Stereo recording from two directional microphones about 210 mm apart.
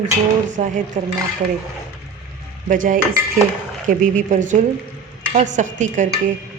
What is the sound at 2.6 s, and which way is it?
A woman's voice, 40° right (ahead or behind).